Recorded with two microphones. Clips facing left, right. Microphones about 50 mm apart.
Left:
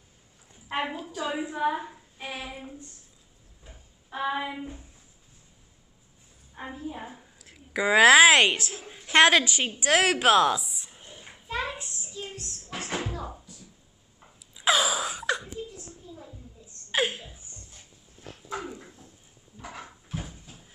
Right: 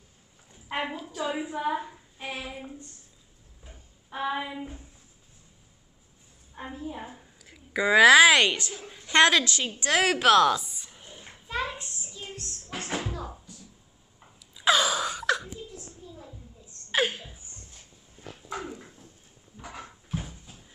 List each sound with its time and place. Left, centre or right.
0.5 s a sound: centre
1.0 s a woman's voice: centre
1.6 s child singing: centre
3.6 s a sound: centre
6.5 s a woman's voice: centre
7.7 s a woman's voice: centre
12.7 s music: centre
14.5 s wail: centre
16.9 s laughter: centre
18.5 s dog: centre
19.6 s a sound: centre